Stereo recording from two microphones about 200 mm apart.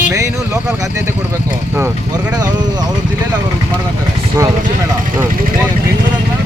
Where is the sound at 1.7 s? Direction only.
10° right (ahead or behind).